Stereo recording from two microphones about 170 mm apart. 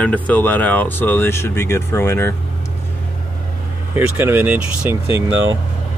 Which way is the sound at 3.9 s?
10° right (ahead or behind).